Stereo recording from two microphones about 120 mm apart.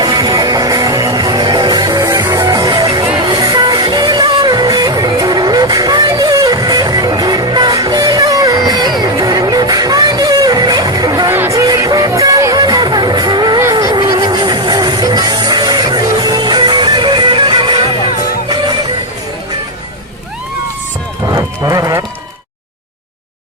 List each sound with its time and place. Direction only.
0.0 s music: 30° right (ahead or behind)
11.3 s music: 20° right (ahead or behind); by 18.8 s 40° right (ahead or behind)
21.3 s livestock: 30° right (ahead or behind)